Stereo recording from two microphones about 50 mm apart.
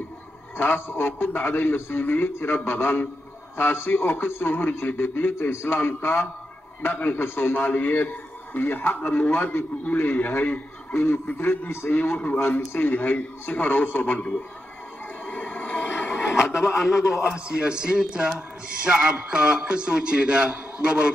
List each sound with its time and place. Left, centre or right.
0.6 s a man's voice: left
5.5 s speech: left
5.8 s a man's voice: left
7.5 s a man's voice: left
10.1 s a man's voice: left
15.2 s a sound: left
16.7 s a man's voice: centre
17.5 s a man's voice: centre